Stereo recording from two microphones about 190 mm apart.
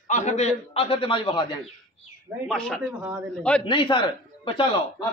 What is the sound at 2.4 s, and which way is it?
Speech, centre (ahead or behind).